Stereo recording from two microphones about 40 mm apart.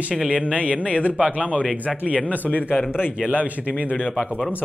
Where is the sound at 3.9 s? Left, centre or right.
Centre.